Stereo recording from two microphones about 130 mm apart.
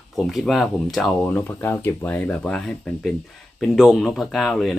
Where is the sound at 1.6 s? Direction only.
15° left (ahead or behind).